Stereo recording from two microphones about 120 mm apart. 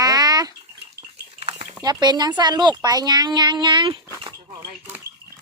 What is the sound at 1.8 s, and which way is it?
Speech, 35° right (ahead or behind).